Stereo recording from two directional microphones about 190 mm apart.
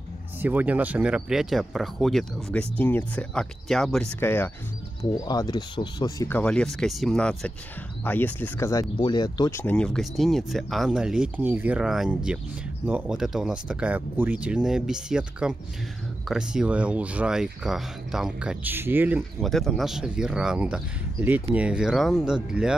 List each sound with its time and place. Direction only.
0.4 s speech: 10° right (ahead or behind); by 9.6 s 20° left (ahead or behind)
9.6 s speech: 5° left (ahead or behind); by 19.2 s 10° right (ahead or behind)
19.4 s speech: centre (ahead or behind)